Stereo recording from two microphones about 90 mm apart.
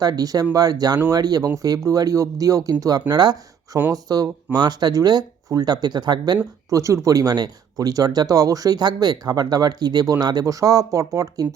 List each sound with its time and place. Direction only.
0.0 s speech: 45° right (ahead or behind)
6.7 s speech: 35° right (ahead or behind)